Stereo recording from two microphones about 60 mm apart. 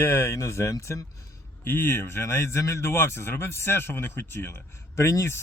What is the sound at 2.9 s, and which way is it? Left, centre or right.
Speech, left.